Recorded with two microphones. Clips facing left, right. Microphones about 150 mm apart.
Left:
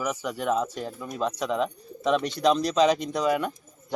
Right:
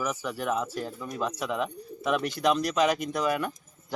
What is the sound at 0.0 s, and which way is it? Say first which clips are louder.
Speech: left 2 dB; 15° left (ahead or behind).